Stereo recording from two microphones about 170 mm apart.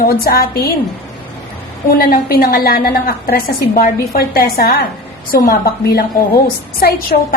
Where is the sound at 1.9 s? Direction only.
55° left (ahead or behind).